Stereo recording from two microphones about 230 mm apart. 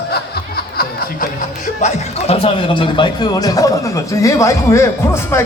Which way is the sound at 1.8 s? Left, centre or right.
Left.